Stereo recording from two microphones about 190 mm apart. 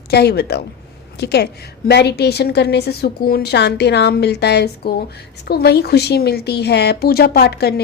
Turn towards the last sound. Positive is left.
turn(degrees=60)  # may be behind; listen again after turning